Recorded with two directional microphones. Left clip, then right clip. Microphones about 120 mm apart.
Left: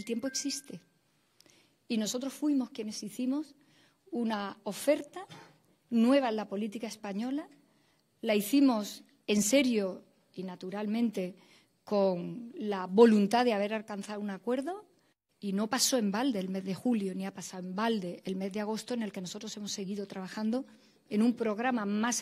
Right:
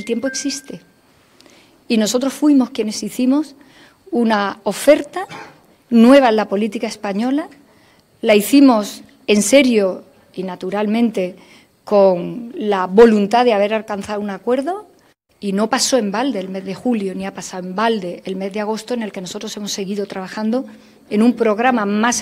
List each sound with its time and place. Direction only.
0.0 s a woman's voice: 25° left (ahead or behind)
1.9 s a woman's voice: 10° left (ahead or behind); by 22.2 s 30° left (ahead or behind)